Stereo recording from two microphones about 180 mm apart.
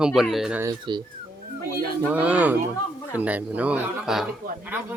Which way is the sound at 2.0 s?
10° right (ahead or behind).